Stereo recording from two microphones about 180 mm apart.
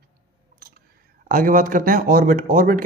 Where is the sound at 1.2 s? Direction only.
50° right (ahead or behind).